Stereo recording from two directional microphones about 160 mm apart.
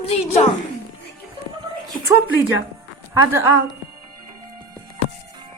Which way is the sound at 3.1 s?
20° right (ahead or behind).